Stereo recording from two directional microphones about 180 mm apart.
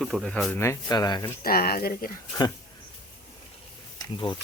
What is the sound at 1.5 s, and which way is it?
Speech, 55° left (ahead or behind).